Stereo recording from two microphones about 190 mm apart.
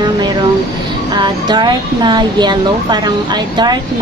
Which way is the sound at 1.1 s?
25° right (ahead or behind).